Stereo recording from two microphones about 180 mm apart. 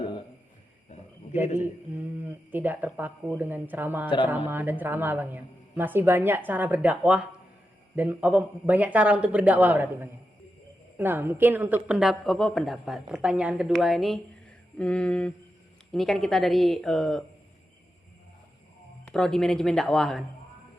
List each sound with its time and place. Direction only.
0.0 s a sound: 30° left (ahead or behind)
2.2 s a woman's voice: 10° right (ahead or behind)
19.1 s a woman's voice: 5° left (ahead or behind)